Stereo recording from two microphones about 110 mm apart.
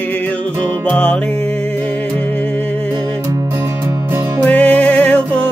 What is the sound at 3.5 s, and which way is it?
Music, 20° right (ahead or behind).